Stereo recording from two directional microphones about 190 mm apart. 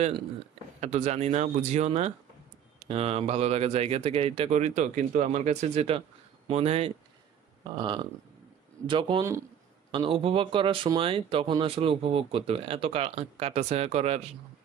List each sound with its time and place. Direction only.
0.7 s speech: 35° right (ahead or behind)